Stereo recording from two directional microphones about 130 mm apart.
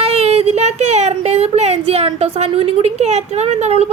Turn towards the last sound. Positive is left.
turn(degrees=-55)  # may be behind; listen again after turning